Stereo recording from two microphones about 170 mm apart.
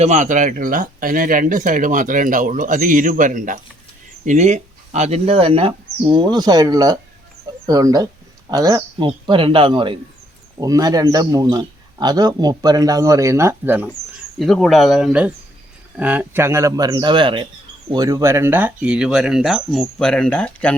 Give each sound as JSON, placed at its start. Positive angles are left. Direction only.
{"t": 0.0, "sound": "a man's voice", "side_deg": -45}
{"t": 14.3, "sound": "a man's voice", "side_deg": 0}